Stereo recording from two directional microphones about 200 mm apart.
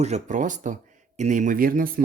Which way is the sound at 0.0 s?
35° right (ahead or behind).